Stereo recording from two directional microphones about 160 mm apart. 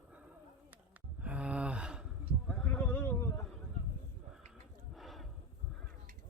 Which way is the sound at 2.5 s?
5° left (ahead or behind).